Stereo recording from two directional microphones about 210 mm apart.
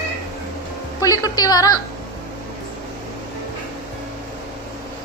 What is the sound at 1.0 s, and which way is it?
Speech, 20° left (ahead or behind).